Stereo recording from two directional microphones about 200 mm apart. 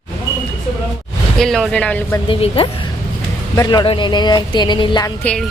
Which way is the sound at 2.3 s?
30° left (ahead or behind).